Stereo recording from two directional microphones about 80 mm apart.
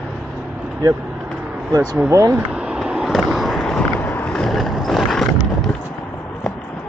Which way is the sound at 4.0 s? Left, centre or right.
Left.